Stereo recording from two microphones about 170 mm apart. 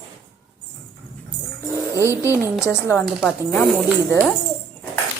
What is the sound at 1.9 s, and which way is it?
Speech, 15° right (ahead or behind).